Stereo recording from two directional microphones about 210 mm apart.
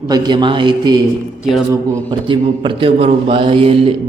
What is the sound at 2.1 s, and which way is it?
A man's voice, 20° right (ahead or behind).